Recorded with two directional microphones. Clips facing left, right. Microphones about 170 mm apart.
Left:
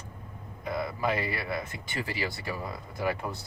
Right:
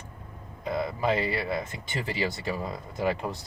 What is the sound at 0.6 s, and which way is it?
Speech, 20° right (ahead or behind).